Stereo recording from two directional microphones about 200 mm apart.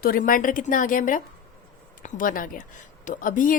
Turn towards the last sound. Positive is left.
turn(degrees=40)  # may be behind; listen again after turning